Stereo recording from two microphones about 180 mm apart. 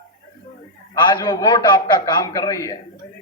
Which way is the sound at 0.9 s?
25° left (ahead or behind).